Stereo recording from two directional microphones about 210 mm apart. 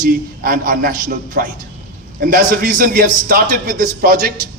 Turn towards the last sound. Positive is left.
turn(degrees=-40)  # may be behind; listen again after turning